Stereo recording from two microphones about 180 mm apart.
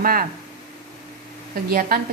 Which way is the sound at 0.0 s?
55° right (ahead or behind).